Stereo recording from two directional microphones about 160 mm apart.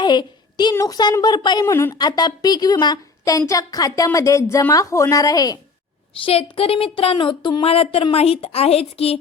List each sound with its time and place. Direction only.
0.0 s a woman's voice: 30° left (ahead or behind)
6.2 s speech: 35° left (ahead or behind)